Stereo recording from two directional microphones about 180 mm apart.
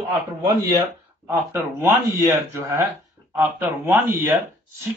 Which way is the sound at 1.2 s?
15° right (ahead or behind).